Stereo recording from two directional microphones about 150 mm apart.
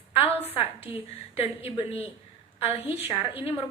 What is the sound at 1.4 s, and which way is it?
Speech, 40° left (ahead or behind).